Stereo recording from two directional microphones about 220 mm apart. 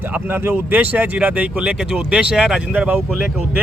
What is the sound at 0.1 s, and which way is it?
Speech, 10° right (ahead or behind).